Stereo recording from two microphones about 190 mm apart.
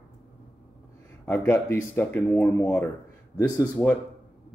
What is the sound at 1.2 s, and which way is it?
Speech, 10° left (ahead or behind).